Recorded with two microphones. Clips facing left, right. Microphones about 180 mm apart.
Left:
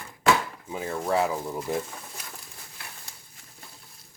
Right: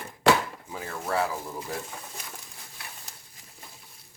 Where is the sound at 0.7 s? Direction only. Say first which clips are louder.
Left 4 dB; 20° left (ahead or behind).